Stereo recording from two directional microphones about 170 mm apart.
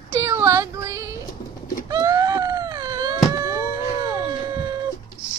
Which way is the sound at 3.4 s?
25° right (ahead or behind).